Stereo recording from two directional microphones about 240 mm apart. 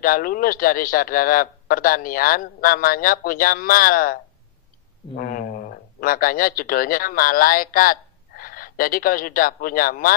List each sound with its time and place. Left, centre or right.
0.0 s a man's voice: left